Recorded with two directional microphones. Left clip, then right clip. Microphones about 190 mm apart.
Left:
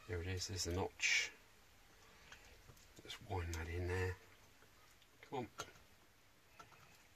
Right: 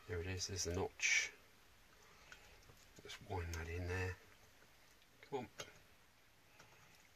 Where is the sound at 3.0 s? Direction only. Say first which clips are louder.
Left 1 dB; 25° right (ahead or behind).